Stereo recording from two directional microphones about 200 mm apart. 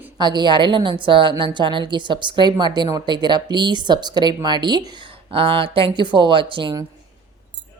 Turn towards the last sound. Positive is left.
turn(degrees=-25)  # may be behind; listen again after turning